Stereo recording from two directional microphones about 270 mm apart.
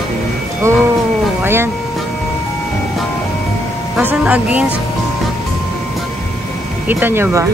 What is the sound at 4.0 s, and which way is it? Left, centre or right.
Music, centre.